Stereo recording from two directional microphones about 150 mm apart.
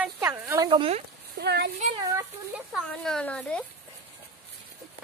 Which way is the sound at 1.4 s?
90° right.